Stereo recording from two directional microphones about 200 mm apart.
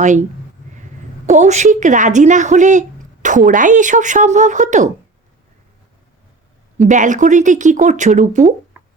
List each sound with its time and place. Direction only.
0.0 s a woman's voice: 40° right (ahead or behind)
1.3 s a woman's voice: 35° right (ahead or behind)
6.7 s a woman's voice: 40° right (ahead or behind)